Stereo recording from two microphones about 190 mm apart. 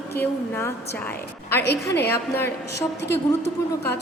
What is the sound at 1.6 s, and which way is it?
Speech, 65° left (ahead or behind).